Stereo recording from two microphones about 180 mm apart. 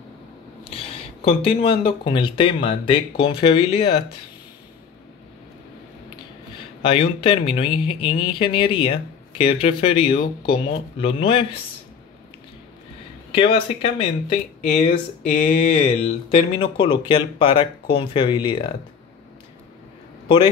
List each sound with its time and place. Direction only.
0.7 s speech: 35° left (ahead or behind)
6.8 s speech: 30° left (ahead or behind)
13.3 s speech: 30° left (ahead or behind)